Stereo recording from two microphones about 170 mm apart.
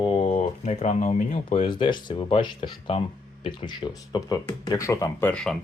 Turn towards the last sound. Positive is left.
turn(degrees=5)  # may be behind; listen again after turning